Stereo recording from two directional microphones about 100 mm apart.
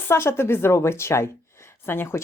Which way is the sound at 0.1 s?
25° left (ahead or behind).